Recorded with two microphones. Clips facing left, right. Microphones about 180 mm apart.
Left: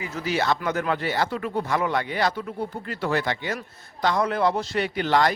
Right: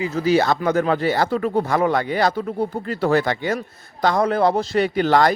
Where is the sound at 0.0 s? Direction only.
35° right (ahead or behind).